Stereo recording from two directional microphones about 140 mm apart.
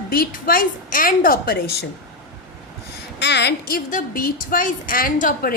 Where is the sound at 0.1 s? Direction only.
90° left.